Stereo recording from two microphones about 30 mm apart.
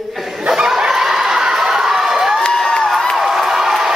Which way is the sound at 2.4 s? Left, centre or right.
Left.